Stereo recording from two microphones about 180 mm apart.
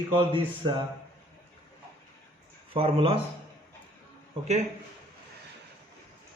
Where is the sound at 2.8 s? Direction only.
30° right (ahead or behind).